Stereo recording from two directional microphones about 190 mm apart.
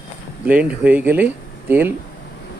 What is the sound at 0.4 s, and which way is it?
Speech, 5° right (ahead or behind).